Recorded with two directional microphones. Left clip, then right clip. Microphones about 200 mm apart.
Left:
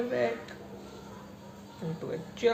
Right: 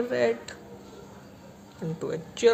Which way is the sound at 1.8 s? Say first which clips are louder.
Right 4 dB; 45° right (ahead or behind).